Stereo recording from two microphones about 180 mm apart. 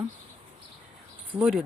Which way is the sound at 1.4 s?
5° right (ahead or behind).